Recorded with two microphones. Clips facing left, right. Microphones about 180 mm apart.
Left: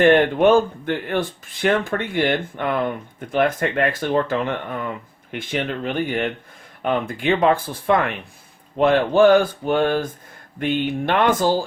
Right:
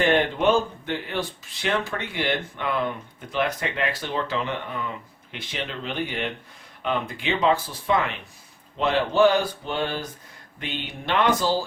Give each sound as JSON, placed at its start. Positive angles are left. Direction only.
{"t": 0.0, "sound": "speech", "side_deg": 50}